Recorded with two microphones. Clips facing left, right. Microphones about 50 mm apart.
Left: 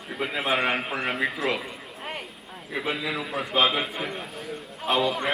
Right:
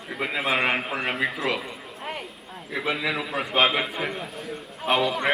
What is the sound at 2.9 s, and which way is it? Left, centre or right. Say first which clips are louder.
Speech: right 3 dB; right.